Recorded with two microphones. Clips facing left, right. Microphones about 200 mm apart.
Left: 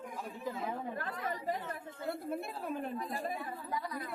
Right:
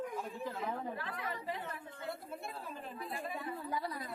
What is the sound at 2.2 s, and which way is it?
Speech, 55° left (ahead or behind).